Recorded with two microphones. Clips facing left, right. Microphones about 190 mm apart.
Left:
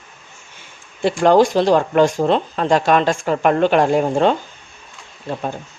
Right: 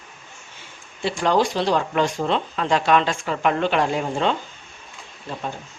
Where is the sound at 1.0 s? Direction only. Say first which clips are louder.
Left 7 dB; 50° left (ahead or behind).